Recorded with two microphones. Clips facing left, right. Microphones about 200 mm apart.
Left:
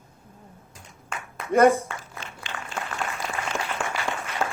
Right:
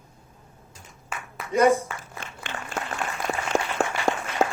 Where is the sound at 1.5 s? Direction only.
55° left (ahead or behind).